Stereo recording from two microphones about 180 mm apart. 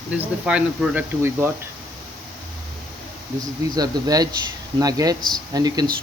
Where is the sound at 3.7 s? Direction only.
20° right (ahead or behind).